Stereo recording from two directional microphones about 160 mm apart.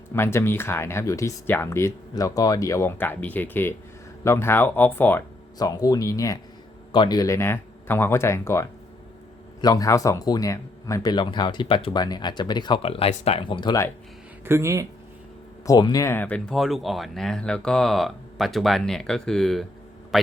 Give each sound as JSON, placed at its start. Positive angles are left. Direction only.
{"t": 0.1, "sound": "speech", "side_deg": 15}
{"t": 5.5, "sound": "a man's voice", "side_deg": 25}
{"t": 14.4, "sound": "speech", "side_deg": -15}
{"t": 15.6, "sound": "speech", "side_deg": 25}